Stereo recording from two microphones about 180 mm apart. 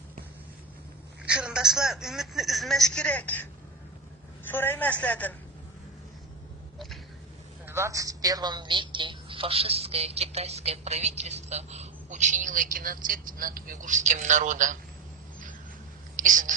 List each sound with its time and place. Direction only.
1.2 s a woman's voice: 5° right (ahead or behind)
4.5 s a woman's voice: 10° left (ahead or behind)
7.6 s a woman's voice: 15° right (ahead or behind); by 14.8 s 45° right (ahead or behind)
16.1 s speech: 45° right (ahead or behind)